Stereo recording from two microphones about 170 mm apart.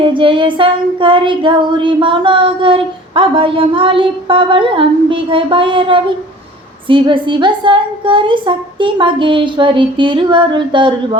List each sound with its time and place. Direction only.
0.1 s child singing: 30° right (ahead or behind)
6.8 s a woman's voice: 30° right (ahead or behind)